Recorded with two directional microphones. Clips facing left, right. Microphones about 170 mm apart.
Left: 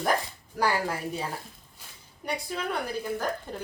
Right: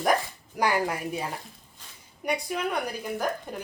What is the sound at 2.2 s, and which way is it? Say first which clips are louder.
Speech: right 4 dB; 15° right (ahead or behind).